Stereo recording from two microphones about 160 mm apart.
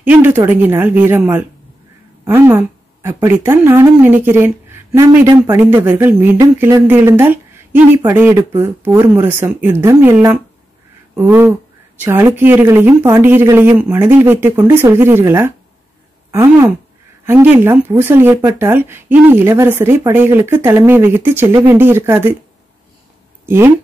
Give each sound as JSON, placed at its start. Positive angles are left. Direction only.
{"t": 0.0, "sound": "speech", "side_deg": -10}
{"t": 23.4, "sound": "speech", "side_deg": -15}